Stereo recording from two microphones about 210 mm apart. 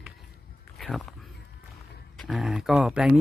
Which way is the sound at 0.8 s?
Centre (ahead or behind).